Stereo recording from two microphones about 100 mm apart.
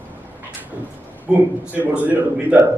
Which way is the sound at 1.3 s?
10° right (ahead or behind).